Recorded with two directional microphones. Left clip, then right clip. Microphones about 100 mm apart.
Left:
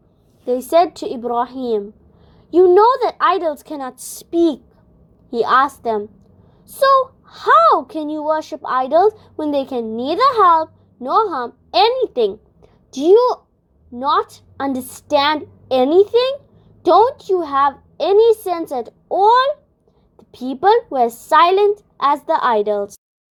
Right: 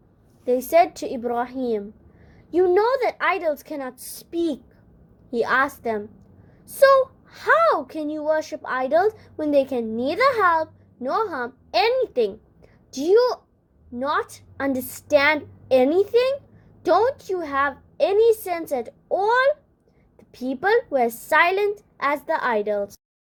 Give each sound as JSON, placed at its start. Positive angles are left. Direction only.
{"t": 0.4, "sound": "a woman's voice", "side_deg": 40}
{"t": 7.3, "sound": "a woman's voice", "side_deg": 45}